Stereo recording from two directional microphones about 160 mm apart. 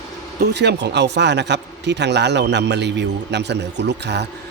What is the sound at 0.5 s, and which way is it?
Speech, 90° right.